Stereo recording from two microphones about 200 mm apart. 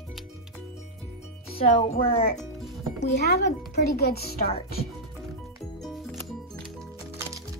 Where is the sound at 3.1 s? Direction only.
55° left (ahead or behind).